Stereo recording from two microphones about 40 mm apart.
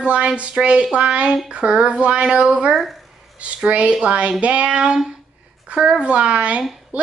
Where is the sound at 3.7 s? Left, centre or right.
Right.